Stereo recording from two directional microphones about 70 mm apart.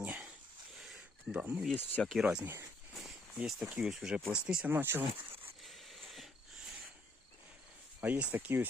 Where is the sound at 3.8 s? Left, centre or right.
Centre.